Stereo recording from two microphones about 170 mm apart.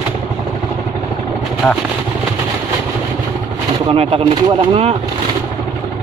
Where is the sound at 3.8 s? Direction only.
35° right (ahead or behind).